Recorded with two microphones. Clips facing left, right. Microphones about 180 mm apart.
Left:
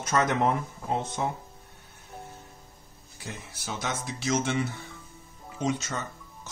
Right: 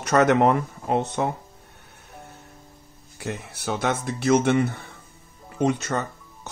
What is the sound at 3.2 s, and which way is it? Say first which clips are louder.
Speech: right 9 dB; 65° right (ahead or behind).